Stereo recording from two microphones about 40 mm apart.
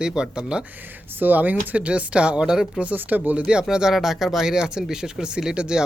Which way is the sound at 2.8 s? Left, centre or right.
Right.